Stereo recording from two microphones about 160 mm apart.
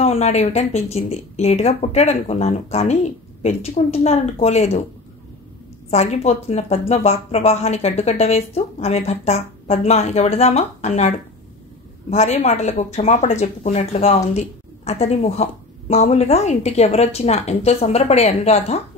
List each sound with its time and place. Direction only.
0.0 s speech: 40° left (ahead or behind)
5.9 s speech: 40° left (ahead or behind)